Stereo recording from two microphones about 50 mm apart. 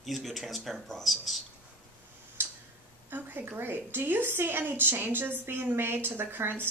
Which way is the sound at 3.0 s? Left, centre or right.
Right.